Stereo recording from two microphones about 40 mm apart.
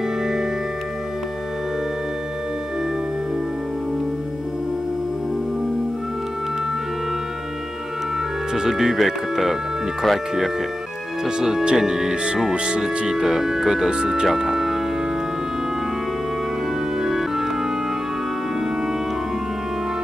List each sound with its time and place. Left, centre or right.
0.2 s music: centre
8.5 s speech: centre
11.2 s speech: centre
12.5 s speech: right
12.8 s speech: centre
14.2 s speech: centre
17.0 s music: centre